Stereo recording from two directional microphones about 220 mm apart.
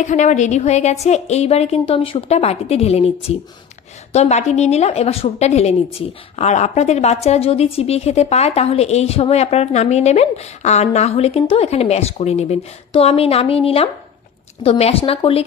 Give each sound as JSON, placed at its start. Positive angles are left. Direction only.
{"t": 0.0, "sound": "a woman's voice", "side_deg": 35}